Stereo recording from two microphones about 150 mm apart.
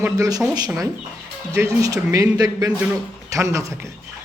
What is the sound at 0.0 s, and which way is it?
Speech, 25° right (ahead or behind).